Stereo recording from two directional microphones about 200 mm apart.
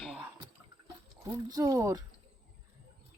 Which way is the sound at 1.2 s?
15° right (ahead or behind).